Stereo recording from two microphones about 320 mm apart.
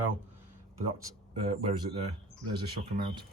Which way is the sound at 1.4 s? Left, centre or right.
Centre.